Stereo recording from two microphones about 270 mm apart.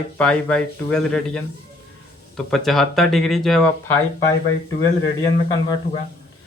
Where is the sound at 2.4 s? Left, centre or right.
Centre.